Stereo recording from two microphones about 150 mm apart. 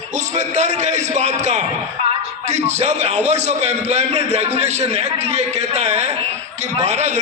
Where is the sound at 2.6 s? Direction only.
45° right (ahead or behind).